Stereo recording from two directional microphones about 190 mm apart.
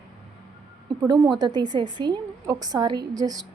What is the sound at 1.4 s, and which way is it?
A woman's voice, 20° right (ahead or behind).